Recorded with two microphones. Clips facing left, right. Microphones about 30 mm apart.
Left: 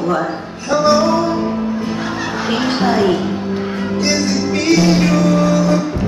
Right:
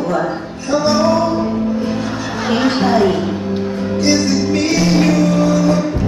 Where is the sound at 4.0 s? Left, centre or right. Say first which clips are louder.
Right 3 dB; centre.